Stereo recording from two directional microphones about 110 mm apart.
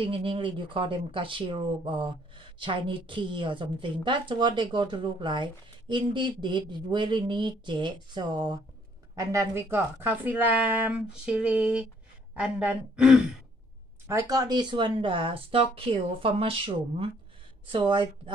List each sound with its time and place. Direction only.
0.0 s speech: 55° right (ahead or behind); by 13.4 s 5° right (ahead or behind)
14.0 s speech: 30° right (ahead or behind); by 18.3 s 50° right (ahead or behind)